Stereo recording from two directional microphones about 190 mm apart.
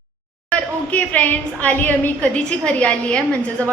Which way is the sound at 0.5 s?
5° left (ahead or behind).